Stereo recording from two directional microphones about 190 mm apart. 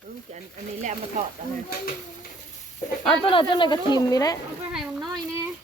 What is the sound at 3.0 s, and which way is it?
Speech, 30° left (ahead or behind).